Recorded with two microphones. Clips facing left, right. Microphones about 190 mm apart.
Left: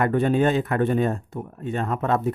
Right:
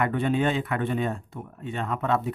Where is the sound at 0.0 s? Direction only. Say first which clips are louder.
Left 4 dB; 45° left (ahead or behind).